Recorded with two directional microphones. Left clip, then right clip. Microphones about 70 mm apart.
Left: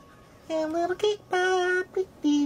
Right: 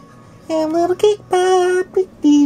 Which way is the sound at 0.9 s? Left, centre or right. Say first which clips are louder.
Right 11 dB; left.